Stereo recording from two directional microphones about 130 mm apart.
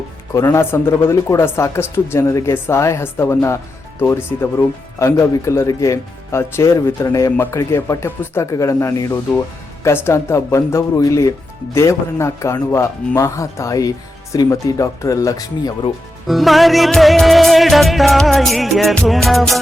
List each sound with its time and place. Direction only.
0.3 s speech: 20° left (ahead or behind)
16.2 s music: centre (ahead or behind)